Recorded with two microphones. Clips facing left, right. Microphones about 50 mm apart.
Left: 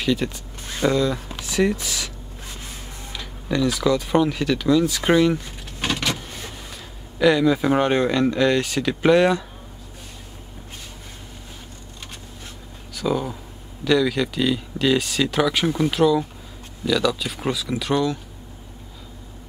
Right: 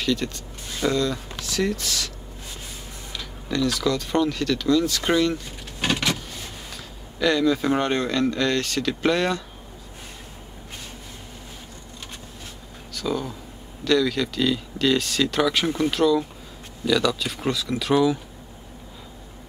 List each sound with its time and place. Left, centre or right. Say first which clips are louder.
0.0 s speech: left 2 dB; centre
3.1 s speech: left 3 dB; centre
5.9 s vehicle: right 1 dB; centre
7.2 s speech: left 3 dB; centre
12.9 s speech: left 3 dB; centre